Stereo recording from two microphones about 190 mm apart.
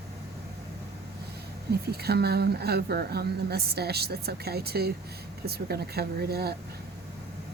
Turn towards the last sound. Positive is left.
turn(degrees=-55)  # may be behind; listen again after turning